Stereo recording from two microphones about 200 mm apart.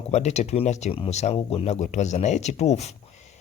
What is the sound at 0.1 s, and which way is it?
Speech, 35° left (ahead or behind).